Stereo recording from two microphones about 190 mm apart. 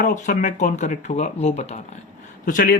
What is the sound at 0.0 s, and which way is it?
Speech, 40° left (ahead or behind).